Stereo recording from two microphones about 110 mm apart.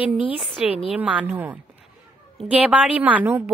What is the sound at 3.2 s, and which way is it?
Speech, 25° right (ahead or behind).